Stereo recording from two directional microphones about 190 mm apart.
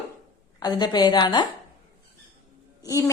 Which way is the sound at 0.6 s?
20° left (ahead or behind).